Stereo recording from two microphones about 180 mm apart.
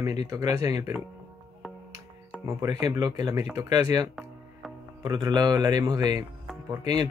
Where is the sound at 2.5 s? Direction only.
15° right (ahead or behind).